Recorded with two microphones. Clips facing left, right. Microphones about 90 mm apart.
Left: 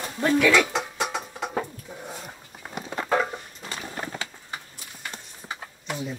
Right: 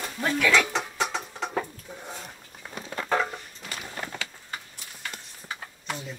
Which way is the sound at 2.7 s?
20° left (ahead or behind).